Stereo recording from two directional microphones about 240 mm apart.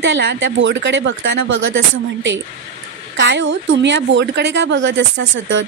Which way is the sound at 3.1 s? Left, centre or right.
Right.